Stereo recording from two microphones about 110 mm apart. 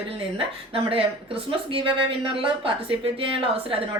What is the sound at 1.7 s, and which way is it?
A woman's voice, 55° right (ahead or behind).